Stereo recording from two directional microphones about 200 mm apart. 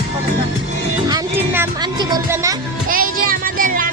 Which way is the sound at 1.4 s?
10° right (ahead or behind).